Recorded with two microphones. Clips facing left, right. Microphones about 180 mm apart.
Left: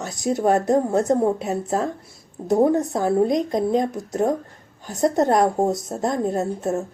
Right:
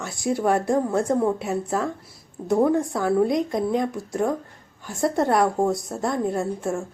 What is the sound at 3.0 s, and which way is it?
A woman's voice, 25° left (ahead or behind).